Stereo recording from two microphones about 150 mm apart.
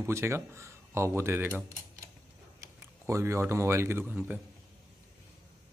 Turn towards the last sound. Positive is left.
turn(degrees=-10)  # may be behind; listen again after turning